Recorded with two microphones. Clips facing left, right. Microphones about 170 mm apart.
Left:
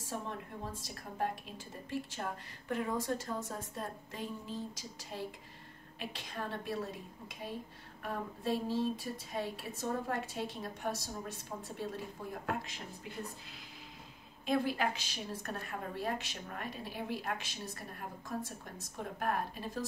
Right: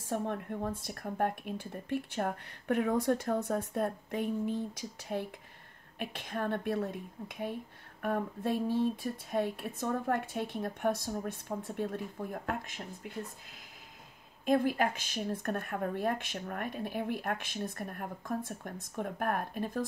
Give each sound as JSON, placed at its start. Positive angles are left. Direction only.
{"t": 0.1, "sound": "a woman's voice", "side_deg": -55}
{"t": 14.4, "sound": "a woman's voice", "side_deg": -45}